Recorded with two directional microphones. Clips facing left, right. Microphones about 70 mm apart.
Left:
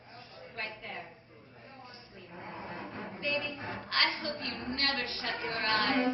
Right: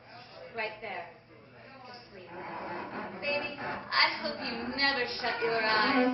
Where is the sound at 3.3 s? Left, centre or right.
Right.